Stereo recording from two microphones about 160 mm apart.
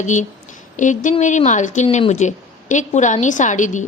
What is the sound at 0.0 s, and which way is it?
A woman's voice, 50° left (ahead or behind).